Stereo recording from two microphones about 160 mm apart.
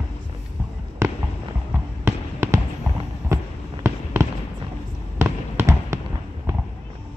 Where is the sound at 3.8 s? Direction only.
15° right (ahead or behind).